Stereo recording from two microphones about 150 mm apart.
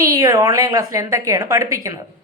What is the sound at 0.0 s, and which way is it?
A woman's voice, 20° right (ahead or behind).